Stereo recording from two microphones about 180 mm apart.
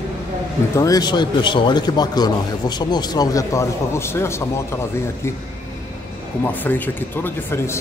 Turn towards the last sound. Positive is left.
turn(degrees=10)  # may be behind; listen again after turning